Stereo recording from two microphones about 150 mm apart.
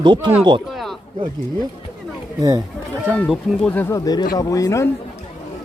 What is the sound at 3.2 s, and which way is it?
Speech, 5° left (ahead or behind).